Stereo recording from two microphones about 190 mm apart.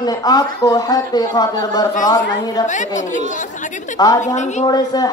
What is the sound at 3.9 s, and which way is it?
Speech, 20° left (ahead or behind).